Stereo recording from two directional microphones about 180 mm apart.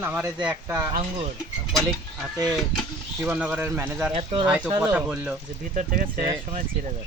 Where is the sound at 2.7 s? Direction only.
Centre (ahead or behind).